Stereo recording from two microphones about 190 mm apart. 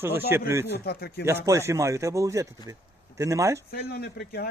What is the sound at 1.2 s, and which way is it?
Speech, 15° right (ahead or behind).